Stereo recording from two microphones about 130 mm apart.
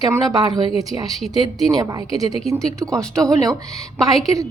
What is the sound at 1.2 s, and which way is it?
Speech, centre (ahead or behind).